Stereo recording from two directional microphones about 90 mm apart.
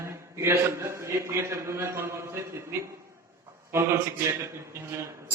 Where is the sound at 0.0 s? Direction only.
30° right (ahead or behind).